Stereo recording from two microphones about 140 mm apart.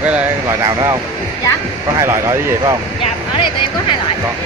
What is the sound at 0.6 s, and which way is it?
Speech, 25° right (ahead or behind).